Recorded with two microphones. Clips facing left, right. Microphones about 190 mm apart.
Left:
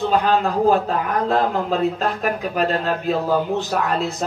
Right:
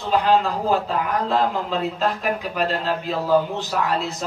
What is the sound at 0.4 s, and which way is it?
A man's voice, 50° left (ahead or behind).